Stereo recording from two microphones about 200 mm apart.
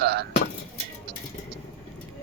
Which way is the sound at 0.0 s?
55° right (ahead or behind).